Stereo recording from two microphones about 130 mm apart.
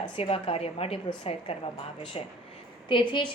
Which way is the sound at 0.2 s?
45° left (ahead or behind).